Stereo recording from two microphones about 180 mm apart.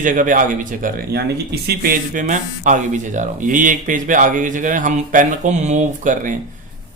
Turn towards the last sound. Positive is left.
turn(degrees=-45)  # may be behind; listen again after turning